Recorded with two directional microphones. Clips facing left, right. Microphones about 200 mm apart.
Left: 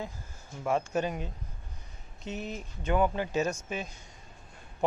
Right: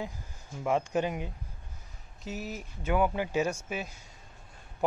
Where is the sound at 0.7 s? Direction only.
15° right (ahead or behind).